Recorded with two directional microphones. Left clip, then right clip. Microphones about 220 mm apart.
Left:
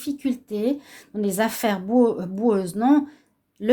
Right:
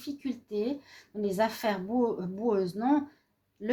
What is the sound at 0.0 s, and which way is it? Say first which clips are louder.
Speech: left 10 dB; 50° left (ahead or behind).